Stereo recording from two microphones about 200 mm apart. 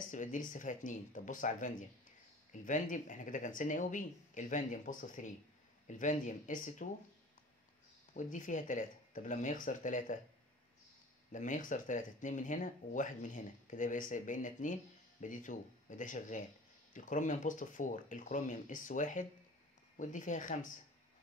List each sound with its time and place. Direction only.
0.1 s speech: 40° left (ahead or behind)
8.1 s speech: 40° left (ahead or behind)
11.3 s speech: 40° left (ahead or behind)